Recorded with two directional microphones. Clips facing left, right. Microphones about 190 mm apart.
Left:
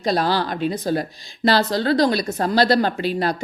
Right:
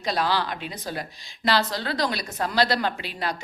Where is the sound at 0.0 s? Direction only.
40° left (ahead or behind).